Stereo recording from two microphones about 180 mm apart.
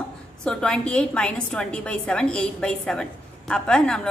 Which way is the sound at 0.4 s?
5° left (ahead or behind).